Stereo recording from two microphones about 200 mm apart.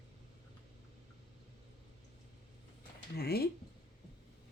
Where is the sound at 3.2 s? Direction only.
50° left (ahead or behind).